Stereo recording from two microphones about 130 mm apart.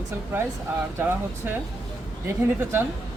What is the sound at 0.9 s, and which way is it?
Speech, 15° right (ahead or behind).